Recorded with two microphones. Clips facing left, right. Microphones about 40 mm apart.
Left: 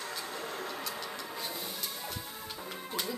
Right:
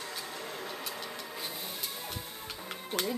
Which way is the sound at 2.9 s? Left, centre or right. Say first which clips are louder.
Right 4 dB; right.